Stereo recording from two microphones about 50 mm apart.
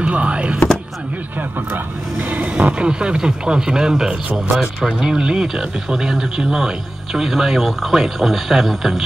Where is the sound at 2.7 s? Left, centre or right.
Centre.